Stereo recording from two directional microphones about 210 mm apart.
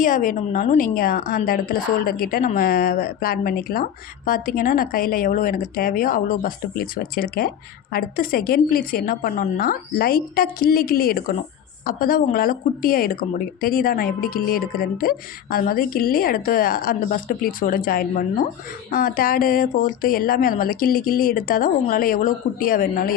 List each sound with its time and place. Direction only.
0.0 s a woman's voice: 40° left (ahead or behind)